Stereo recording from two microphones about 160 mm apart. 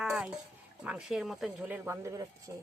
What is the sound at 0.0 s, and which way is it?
Speech, 5° right (ahead or behind).